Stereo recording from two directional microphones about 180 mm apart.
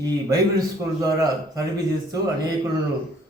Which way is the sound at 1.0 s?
20° right (ahead or behind).